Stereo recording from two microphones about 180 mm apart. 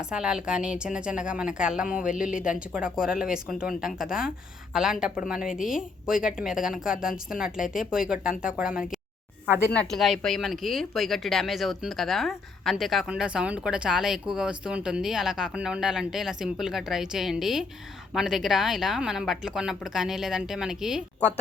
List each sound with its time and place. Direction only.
0.1 s speech: 5° right (ahead or behind)